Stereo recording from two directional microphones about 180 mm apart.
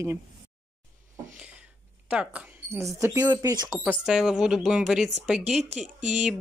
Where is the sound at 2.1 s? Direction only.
5° right (ahead or behind).